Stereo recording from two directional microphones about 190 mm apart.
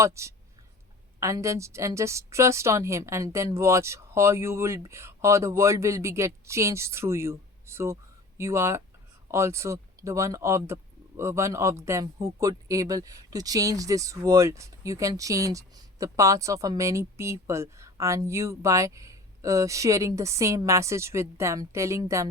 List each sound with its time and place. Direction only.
0.0 s speech: 15° right (ahead or behind)